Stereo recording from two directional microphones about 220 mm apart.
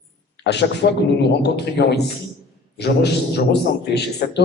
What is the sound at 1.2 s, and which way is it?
A man's voice, 50° left (ahead or behind).